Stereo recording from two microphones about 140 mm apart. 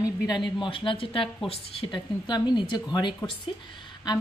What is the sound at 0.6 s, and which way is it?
A woman's voice, 35° left (ahead or behind).